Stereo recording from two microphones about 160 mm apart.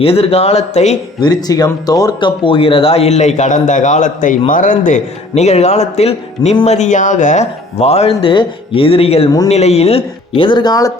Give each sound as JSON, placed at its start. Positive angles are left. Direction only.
{"t": 0.0, "sound": "speech", "side_deg": 35}
{"t": 1.2, "sound": "speech", "side_deg": 25}